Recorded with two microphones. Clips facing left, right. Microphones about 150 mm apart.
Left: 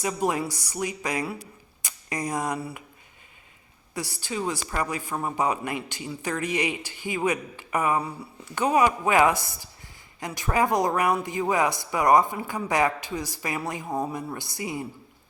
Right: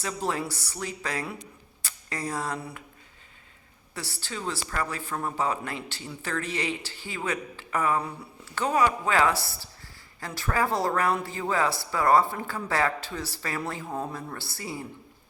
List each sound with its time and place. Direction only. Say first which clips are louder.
0.0 s speech: left 4 dB; 15° left (ahead or behind)
1.8 s a sound: left 3 dB; 15° left (ahead or behind)
2.6 s speech: left 4 dB; 5° left (ahead or behind)
3.9 s speech: left 6 dB; 15° left (ahead or behind)